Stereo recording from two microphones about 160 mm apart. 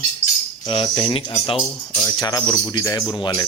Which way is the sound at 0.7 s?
35° left (ahead or behind).